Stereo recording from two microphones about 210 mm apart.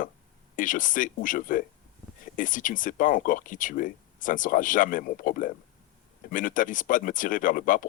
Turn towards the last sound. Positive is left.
turn(degrees=40)  # may be behind; listen again after turning